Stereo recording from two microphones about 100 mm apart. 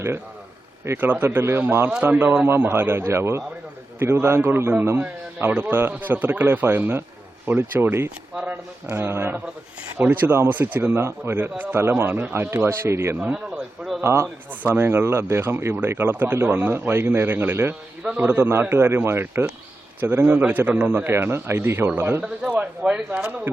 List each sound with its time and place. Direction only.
0.9 s speech: 20° right (ahead or behind)
13.1 s a man's voice: 15° right (ahead or behind)
14.0 s speech: 25° right (ahead or behind)